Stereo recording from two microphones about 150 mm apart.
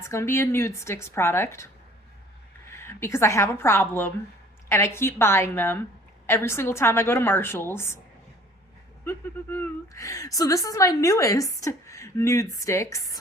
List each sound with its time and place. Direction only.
0.1 s a woman's voice: 20° left (ahead or behind)
9.0 s a woman's voice: 15° left (ahead or behind)